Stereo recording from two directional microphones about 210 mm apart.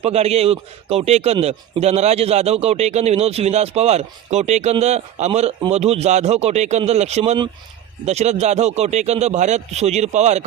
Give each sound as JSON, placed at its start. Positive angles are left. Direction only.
{"t": 0.0, "sound": "a man's voice", "side_deg": -30}